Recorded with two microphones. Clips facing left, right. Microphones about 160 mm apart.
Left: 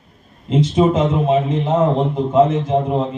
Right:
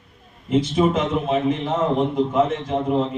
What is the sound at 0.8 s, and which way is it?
A man's voice, 25° left (ahead or behind).